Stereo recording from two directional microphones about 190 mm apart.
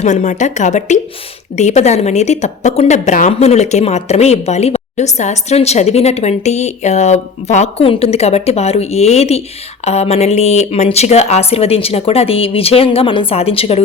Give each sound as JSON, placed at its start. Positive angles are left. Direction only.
{"t": 0.0, "sound": "a woman's voice", "side_deg": 40}